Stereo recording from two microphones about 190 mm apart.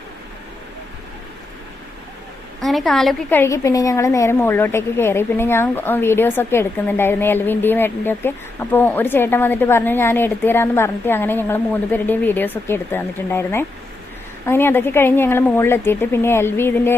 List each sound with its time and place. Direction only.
2.6 s a woman's voice: centre (ahead or behind)